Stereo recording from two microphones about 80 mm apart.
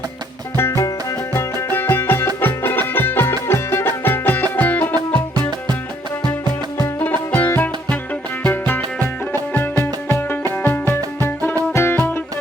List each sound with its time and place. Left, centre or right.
0.5 s music: left
4.9 s music: right
7.3 s music: left
9.8 s music: left